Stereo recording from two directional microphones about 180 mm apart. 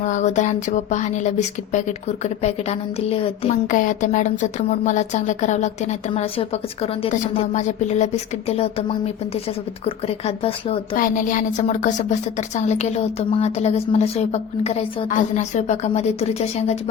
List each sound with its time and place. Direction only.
0.0 s a woman's voice: 40° left (ahead or behind)
3.7 s a woman's voice: 45° left (ahead or behind)
10.9 s a woman's voice: 50° left (ahead or behind)